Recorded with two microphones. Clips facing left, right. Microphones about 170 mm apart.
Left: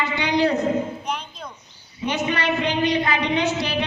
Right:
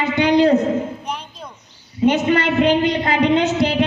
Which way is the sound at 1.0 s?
5° right (ahead or behind).